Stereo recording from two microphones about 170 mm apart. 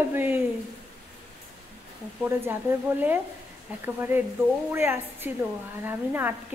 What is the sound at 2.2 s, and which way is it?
A woman's voice, 10° right (ahead or behind).